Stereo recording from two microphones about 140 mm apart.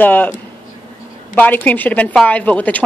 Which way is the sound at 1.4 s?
10° left (ahead or behind).